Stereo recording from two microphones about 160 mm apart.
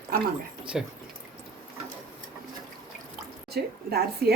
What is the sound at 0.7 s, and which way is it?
Speech, 5° right (ahead or behind).